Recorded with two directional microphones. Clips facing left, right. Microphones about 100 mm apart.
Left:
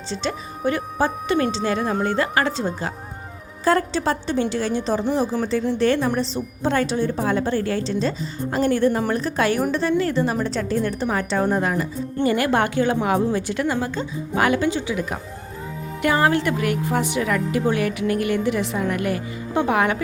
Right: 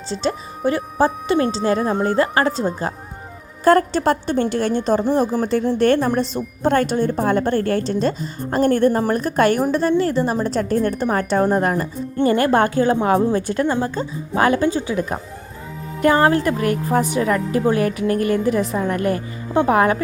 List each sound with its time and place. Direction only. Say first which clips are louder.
0.1 s a woman's voice: right 4 dB; 35° right (ahead or behind)
3.6 s a woman's voice: right 5 dB; 50° right (ahead or behind)
9.9 s a woman's voice: right 2 dB; 35° right (ahead or behind)